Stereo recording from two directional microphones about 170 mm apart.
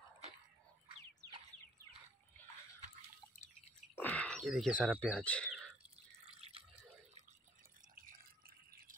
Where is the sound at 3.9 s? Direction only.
10° left (ahead or behind).